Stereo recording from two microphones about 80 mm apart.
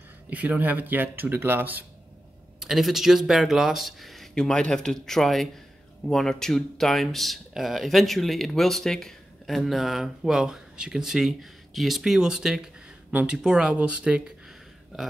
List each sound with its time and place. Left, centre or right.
0.3 s speech: right
2.6 s speech: centre